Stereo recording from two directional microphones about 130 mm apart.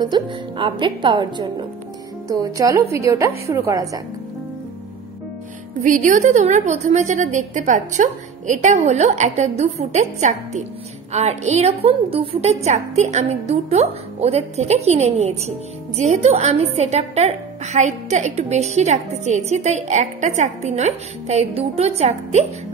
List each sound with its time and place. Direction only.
0.0 s a woman's voice: 35° right (ahead or behind)
5.8 s a woman's voice: 80° right; by 22.5 s 55° right (ahead or behind)